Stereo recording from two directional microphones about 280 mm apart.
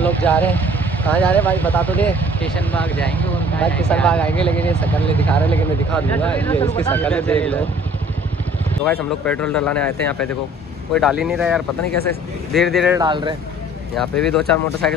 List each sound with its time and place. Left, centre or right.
0.0 s speech: centre
8.8 s speech: centre
13.0 s speech: centre
13.9 s speech: centre